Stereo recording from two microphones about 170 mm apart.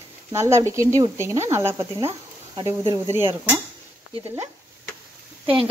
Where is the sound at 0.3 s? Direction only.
15° right (ahead or behind).